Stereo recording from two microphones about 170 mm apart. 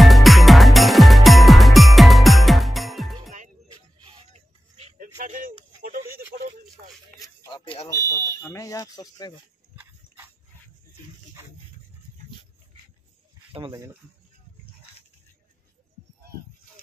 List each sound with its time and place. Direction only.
0.0 s music: centre (ahead or behind)
4.3 s music: 40° right (ahead or behind)
4.9 s a sound: 55° right (ahead or behind)
7.2 s a sound: 30° left (ahead or behind)
7.9 s smoke detector: 15° left (ahead or behind)
9.8 s horse: 10° right (ahead or behind)
13.5 s speech: 30° right (ahead or behind)